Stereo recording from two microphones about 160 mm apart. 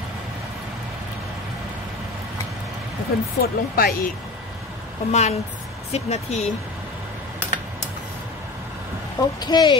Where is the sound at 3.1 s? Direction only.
65° left (ahead or behind).